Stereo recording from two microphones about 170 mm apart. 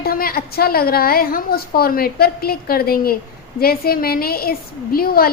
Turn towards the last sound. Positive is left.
turn(degrees=60)  # may be behind; listen again after turning